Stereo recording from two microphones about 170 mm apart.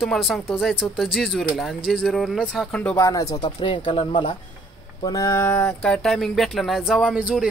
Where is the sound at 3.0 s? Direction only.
20° left (ahead or behind).